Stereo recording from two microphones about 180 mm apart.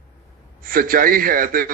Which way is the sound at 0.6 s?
50° right (ahead or behind).